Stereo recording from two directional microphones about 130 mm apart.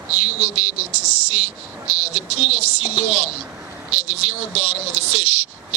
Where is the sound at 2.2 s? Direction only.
55° right (ahead or behind).